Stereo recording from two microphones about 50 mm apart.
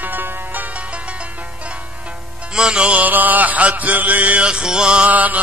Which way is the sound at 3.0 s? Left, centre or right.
Right.